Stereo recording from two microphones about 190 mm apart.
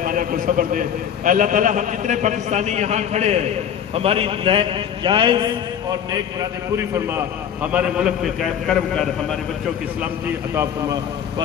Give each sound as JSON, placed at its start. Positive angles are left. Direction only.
{"t": 0.0, "sound": "a man's voice", "side_deg": -45}
{"t": 7.6, "sound": "a man's voice", "side_deg": -5}
{"t": 10.5, "sound": "a man's voice", "side_deg": -10}